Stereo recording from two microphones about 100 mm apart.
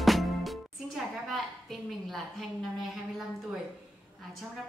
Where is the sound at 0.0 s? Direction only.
Centre (ahead or behind).